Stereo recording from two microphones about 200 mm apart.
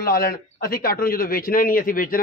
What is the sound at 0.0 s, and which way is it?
A man's voice, 50° left (ahead or behind).